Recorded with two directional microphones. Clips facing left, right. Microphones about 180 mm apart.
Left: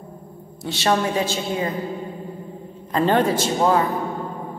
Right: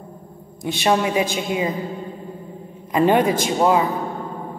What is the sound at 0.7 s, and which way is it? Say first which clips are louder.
A man's voice: right 2 dB; 15° right (ahead or behind).